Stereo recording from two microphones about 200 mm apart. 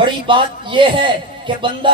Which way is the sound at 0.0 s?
25° right (ahead or behind).